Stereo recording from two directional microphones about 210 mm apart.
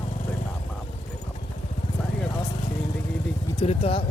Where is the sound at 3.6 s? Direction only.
30° left (ahead or behind).